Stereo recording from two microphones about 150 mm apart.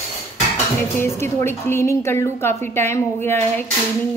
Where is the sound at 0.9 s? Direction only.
15° left (ahead or behind).